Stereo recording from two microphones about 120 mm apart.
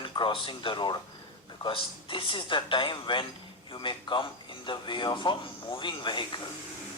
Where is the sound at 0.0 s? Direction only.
45° left (ahead or behind).